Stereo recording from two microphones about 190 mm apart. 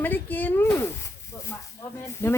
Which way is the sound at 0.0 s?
10° left (ahead or behind).